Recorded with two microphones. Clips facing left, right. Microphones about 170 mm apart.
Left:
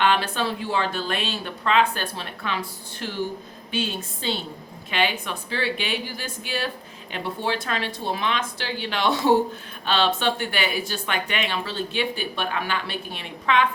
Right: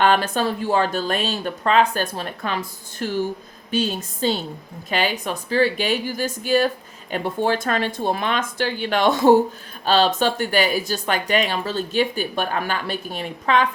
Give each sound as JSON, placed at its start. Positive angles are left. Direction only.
{"t": 0.0, "sound": "speech", "side_deg": -45}